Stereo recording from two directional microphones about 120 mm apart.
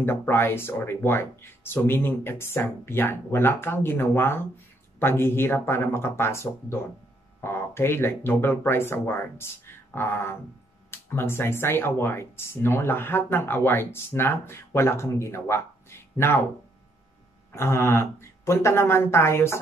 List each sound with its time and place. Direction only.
0.0 s speech: 20° left (ahead or behind)
17.5 s speech: 20° left (ahead or behind)